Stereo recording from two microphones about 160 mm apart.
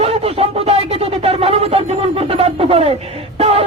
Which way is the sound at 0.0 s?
40° right (ahead or behind).